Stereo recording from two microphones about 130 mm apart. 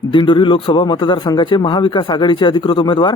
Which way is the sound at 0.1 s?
40° left (ahead or behind).